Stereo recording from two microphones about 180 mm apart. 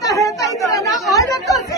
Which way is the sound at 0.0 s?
20° left (ahead or behind).